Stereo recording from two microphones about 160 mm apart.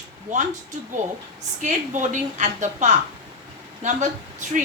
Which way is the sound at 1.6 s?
50° right (ahead or behind).